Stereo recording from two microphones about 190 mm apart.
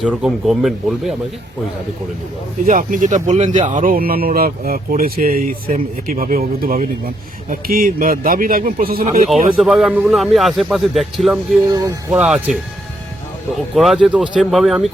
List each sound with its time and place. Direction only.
0.0 s a man's voice: 5° right (ahead or behind)
2.6 s speech: 45° right (ahead or behind)
9.0 s speech: 35° right (ahead or behind)
9.6 s a man's voice: centre (ahead or behind)
11.7 s speech: 20° right (ahead or behind)
12.1 s a man's voice: 5° right (ahead or behind)
13.7 s a man's voice: centre (ahead or behind)